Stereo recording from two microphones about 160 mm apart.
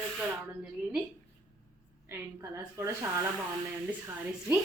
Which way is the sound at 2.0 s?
15° right (ahead or behind).